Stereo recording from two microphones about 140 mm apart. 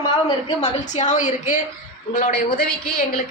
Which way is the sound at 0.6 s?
55° left (ahead or behind).